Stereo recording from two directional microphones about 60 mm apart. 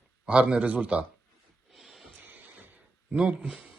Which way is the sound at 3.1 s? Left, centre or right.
Centre.